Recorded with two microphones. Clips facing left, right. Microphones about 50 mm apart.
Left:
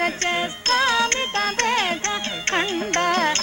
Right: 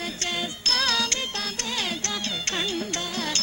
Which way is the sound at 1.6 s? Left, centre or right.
Left.